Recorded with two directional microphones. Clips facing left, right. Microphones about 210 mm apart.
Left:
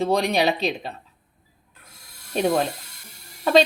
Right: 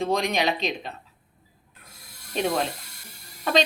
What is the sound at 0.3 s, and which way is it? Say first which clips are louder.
Speech: left 4 dB; 35° left (ahead or behind).